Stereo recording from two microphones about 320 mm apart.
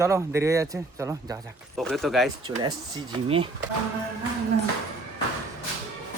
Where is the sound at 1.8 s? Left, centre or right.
Centre.